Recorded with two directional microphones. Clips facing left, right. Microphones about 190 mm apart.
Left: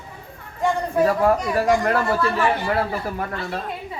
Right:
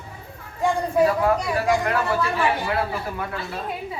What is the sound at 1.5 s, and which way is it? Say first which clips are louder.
Speech: left 3 dB; 40° left (ahead or behind).